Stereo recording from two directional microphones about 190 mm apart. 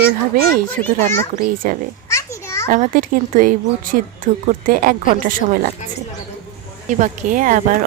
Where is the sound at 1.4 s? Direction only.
45° right (ahead or behind).